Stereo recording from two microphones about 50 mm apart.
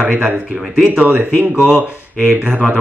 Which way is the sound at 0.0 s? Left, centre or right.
Right.